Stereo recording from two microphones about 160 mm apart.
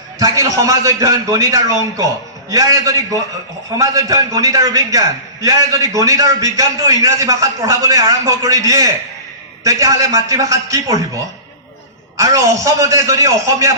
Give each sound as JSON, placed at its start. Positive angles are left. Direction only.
{"t": 0.2, "sound": "a man's voice", "side_deg": -20}